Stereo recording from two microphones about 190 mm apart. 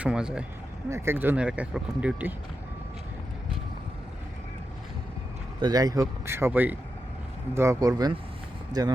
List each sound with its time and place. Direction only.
0.0 s speech: 5° right (ahead or behind)
5.5 s speech: 20° right (ahead or behind)